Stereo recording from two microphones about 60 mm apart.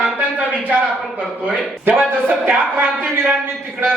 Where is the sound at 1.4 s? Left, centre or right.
Right.